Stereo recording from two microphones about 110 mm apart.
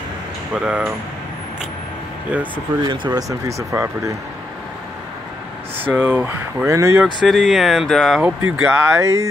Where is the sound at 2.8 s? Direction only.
40° right (ahead or behind).